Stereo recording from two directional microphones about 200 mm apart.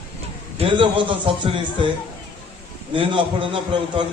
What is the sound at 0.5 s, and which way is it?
A man's voice, 25° right (ahead or behind).